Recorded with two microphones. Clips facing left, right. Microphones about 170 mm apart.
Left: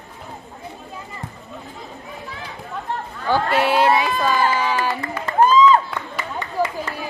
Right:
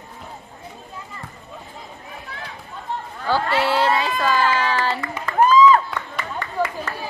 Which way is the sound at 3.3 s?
15° left (ahead or behind).